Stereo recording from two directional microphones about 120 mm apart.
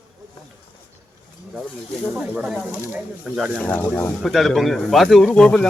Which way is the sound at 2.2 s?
5° right (ahead or behind).